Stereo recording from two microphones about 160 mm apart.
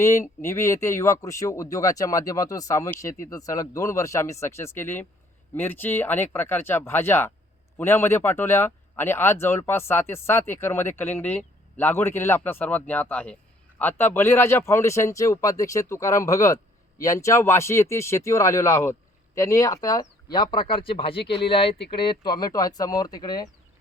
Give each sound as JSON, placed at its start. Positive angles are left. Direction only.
{"t": 0.0, "sound": "speech", "side_deg": 15}